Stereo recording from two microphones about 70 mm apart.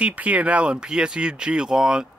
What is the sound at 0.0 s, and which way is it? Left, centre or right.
Speech, centre.